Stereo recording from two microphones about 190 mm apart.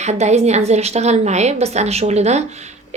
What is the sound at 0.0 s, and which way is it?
A woman's voice, 35° right (ahead or behind).